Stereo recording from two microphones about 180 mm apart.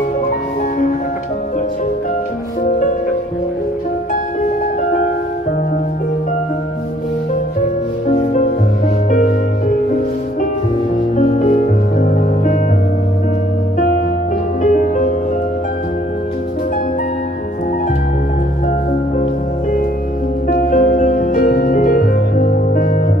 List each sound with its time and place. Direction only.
9.1 s music: 45° left (ahead or behind)
11.1 s music: 40° left (ahead or behind)
14.6 s music: 45° left (ahead or behind)
20.7 s music: 45° left (ahead or behind)